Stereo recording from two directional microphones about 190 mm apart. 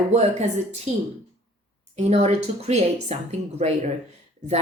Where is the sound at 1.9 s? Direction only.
35° right (ahead or behind).